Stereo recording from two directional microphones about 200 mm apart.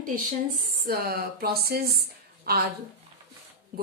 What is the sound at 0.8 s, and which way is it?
Speech, 50° right (ahead or behind).